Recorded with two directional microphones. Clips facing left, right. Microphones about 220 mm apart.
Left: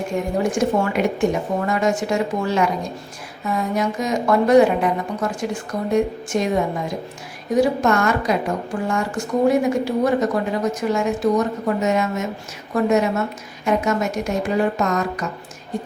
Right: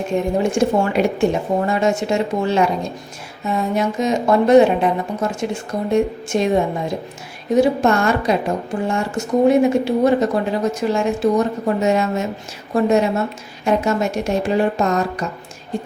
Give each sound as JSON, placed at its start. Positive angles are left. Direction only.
{"t": 0.1, "sound": "speech", "side_deg": -25}
{"t": 7.5, "sound": "speech", "side_deg": -25}